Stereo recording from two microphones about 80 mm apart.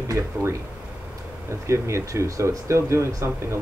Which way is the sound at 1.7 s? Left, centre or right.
Right.